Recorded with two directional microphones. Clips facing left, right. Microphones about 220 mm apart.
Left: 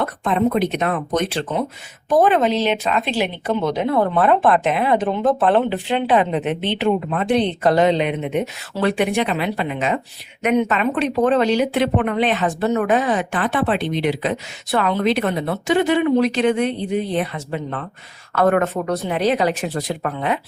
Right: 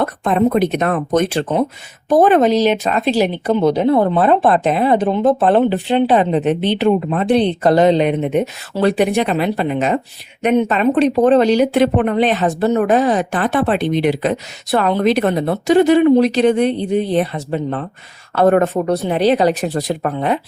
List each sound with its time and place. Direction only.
0.0 s speech: 45° right (ahead or behind)